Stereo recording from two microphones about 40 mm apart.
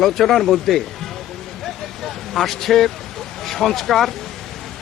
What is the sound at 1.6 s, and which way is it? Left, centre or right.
Vehicle, centre.